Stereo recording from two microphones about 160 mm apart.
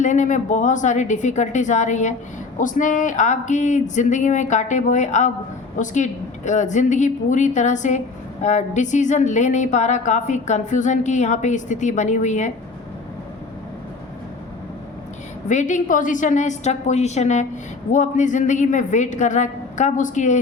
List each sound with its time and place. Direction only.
0.0 s a woman's voice: 50° left (ahead or behind)
15.4 s a woman's voice: 50° left (ahead or behind)